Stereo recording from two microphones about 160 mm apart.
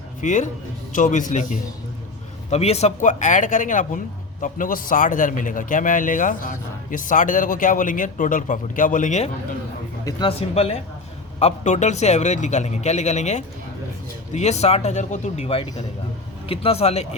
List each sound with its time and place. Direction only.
0.2 s a man's voice: 50° left (ahead or behind)
10.1 s a man's voice: 30° left (ahead or behind)